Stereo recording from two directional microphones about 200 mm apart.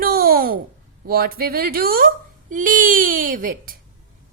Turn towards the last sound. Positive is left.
turn(degrees=-45)  # may be behind; listen again after turning